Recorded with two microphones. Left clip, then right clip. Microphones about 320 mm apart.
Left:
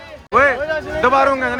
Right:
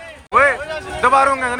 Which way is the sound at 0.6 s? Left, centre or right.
Left.